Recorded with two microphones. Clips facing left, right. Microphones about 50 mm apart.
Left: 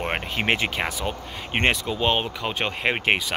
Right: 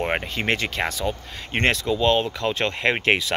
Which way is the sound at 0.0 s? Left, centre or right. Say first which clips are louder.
Right 3 dB; centre.